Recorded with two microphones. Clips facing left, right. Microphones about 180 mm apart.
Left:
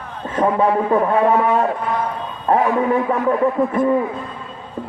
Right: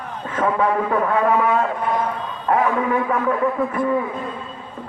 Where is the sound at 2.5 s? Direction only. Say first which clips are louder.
Left 3 dB; 30° left (ahead or behind).